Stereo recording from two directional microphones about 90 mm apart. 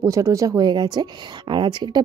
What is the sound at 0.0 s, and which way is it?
Speech, 35° right (ahead or behind).